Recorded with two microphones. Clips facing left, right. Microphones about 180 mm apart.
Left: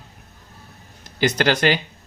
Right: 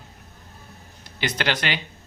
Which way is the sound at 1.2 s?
45° left (ahead or behind).